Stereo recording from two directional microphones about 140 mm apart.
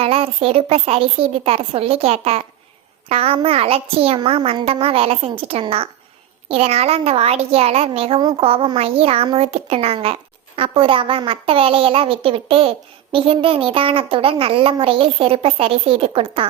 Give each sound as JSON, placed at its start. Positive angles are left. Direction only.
{"t": 0.0, "sound": "a child's voice", "side_deg": -45}